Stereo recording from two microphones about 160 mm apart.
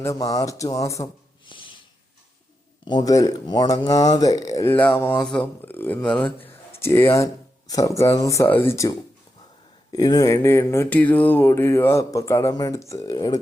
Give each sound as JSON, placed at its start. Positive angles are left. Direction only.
{"t": 0.0, "sound": "speech", "side_deg": 20}
{"t": 1.5, "sound": "snort", "side_deg": 30}
{"t": 2.8, "sound": "speech", "side_deg": 25}